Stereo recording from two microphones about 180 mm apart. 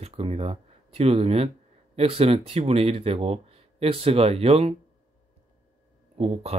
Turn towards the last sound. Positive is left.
turn(degrees=-35)  # may be behind; listen again after turning